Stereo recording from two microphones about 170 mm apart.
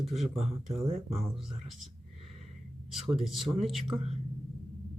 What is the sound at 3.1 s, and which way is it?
Speech, centre (ahead or behind).